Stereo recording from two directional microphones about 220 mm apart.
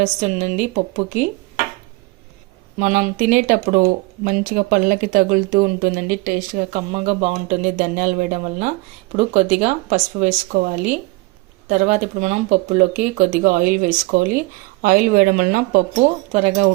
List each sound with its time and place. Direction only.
0.0 s speech: 30° right (ahead or behind)
2.7 s speech: 35° right (ahead or behind)